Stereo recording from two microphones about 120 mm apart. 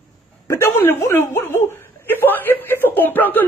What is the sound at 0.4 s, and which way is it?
A man's voice, 20° left (ahead or behind).